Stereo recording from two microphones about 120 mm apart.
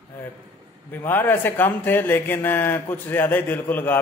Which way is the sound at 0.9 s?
15° left (ahead or behind).